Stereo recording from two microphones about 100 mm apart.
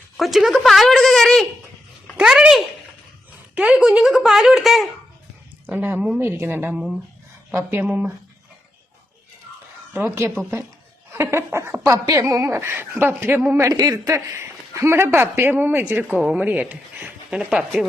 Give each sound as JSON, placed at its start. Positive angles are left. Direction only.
{"t": 0.2, "sound": "speech", "side_deg": 0}
{"t": 5.6, "sound": "a woman's voice", "side_deg": -15}
{"t": 6.7, "sound": "speech", "side_deg": -5}
{"t": 7.5, "sound": "a woman's voice", "side_deg": -20}
{"t": 7.9, "sound": "speech", "side_deg": -10}
{"t": 9.9, "sound": "a woman's voice", "side_deg": -25}
{"t": 13.7, "sound": "a man's voice", "side_deg": -40}
{"t": 14.3, "sound": "a woman's voice", "side_deg": -30}